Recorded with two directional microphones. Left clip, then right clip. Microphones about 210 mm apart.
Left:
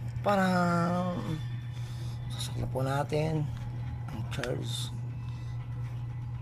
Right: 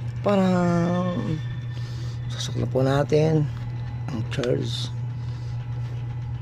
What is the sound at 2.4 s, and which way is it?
Speech, 25° right (ahead or behind).